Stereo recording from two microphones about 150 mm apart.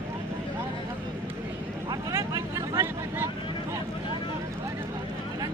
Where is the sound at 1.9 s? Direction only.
20° right (ahead or behind).